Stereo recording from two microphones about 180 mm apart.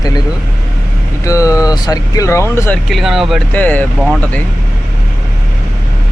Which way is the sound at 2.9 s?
Centre (ahead or behind).